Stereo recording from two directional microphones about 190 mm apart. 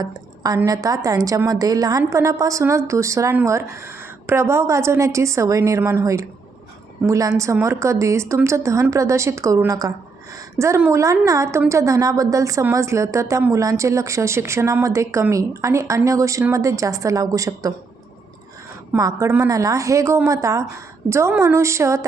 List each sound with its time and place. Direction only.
0.0 s a woman's voice: 20° right (ahead or behind)
18.9 s a woman's voice: 15° right (ahead or behind)